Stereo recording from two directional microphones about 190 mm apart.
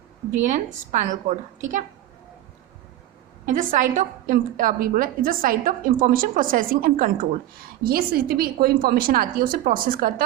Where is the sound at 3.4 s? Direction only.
45° right (ahead or behind).